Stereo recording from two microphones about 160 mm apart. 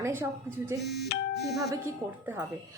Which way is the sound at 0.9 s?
90° left.